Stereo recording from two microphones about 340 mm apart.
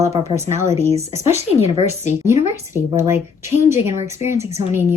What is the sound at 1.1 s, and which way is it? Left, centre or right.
Speech, centre.